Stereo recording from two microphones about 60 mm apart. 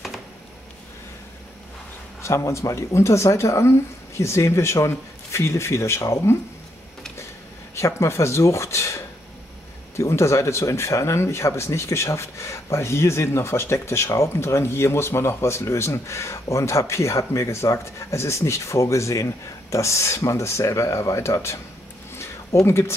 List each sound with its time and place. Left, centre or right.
2.2 s speech: left
7.7 s speech: left
22.1 s a sound: left